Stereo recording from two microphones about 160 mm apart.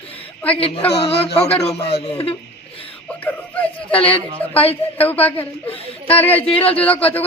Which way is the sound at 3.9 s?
35° left (ahead or behind).